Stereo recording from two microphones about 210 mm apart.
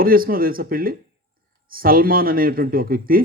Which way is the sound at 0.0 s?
45° right (ahead or behind).